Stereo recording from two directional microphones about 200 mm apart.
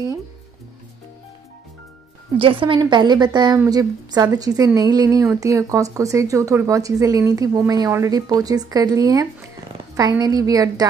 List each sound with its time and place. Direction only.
2.3 s a woman's voice: 25° right (ahead or behind)